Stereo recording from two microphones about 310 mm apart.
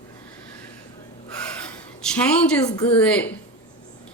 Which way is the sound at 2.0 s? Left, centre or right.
Centre.